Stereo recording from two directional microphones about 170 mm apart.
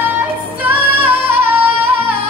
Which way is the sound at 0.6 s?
10° right (ahead or behind).